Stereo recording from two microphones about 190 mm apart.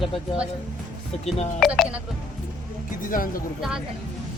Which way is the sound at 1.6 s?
5° right (ahead or behind).